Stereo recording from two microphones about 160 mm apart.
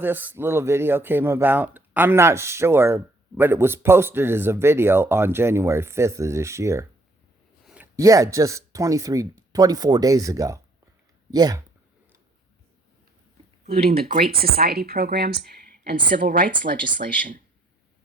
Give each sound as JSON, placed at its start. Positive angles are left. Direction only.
{"t": 0.0, "sound": "speech", "side_deg": -10}
{"t": 7.6, "sound": "a sound", "side_deg": -5}
{"t": 7.9, "sound": "speech", "side_deg": -20}
{"t": 13.7, "sound": "speech", "side_deg": -40}
{"t": 14.3, "sound": "speech", "side_deg": -70}